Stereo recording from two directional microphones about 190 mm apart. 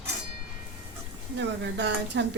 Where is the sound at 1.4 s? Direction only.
65° right (ahead or behind).